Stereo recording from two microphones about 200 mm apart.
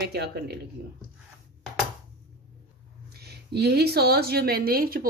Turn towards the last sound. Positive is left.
turn(degrees=-45)  # may be behind; listen again after turning